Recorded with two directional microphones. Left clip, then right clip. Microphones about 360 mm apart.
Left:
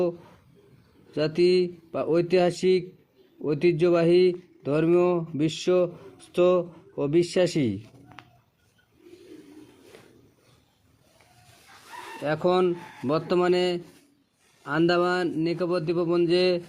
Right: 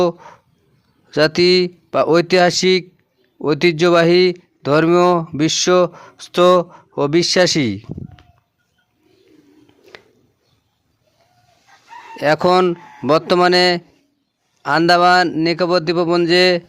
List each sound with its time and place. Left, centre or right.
1.1 s a man's voice: right
12.2 s a man's voice: right